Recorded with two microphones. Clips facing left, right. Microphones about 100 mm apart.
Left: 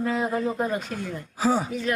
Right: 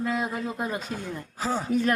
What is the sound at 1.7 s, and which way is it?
Speech, 45° right (ahead or behind).